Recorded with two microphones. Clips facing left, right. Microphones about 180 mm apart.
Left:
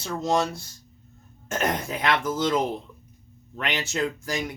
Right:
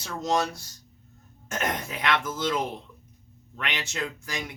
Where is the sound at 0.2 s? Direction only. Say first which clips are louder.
Left 1 dB; 30° left (ahead or behind).